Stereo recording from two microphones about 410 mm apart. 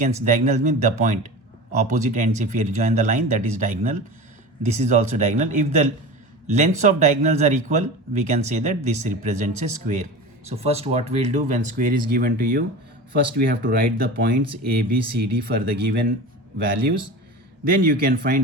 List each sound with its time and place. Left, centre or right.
0.0 s speech: centre
17.7 s speech: right